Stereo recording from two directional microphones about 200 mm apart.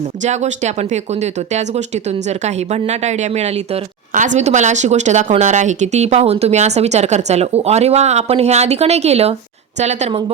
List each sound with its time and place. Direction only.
0.2 s a woman's voice: 35° right (ahead or behind)